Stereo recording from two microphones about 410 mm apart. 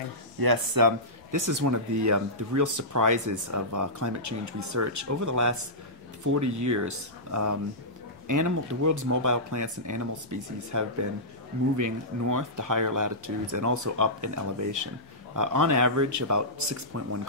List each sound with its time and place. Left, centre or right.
0.4 s speech: right